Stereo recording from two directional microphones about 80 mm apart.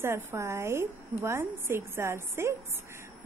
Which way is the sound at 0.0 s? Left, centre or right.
Right.